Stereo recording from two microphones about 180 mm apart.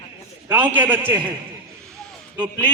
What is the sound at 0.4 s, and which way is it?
Speech, 10° right (ahead or behind).